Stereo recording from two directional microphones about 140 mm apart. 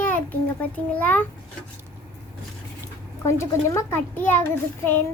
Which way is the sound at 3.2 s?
20° left (ahead or behind).